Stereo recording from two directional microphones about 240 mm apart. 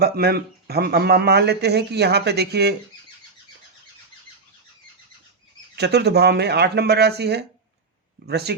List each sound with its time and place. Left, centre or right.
0.0 s speech: right
5.7 s speech: right